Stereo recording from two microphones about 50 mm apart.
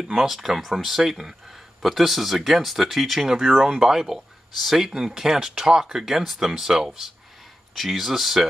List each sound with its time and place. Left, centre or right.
0.0 s speech: centre